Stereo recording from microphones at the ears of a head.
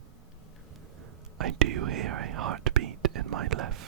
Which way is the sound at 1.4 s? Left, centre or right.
Right.